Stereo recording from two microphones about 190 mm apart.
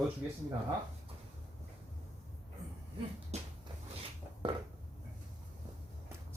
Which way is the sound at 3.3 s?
35° right (ahead or behind).